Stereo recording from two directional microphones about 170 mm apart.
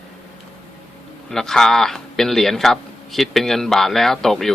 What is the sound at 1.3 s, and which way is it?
Speech, 5° left (ahead or behind).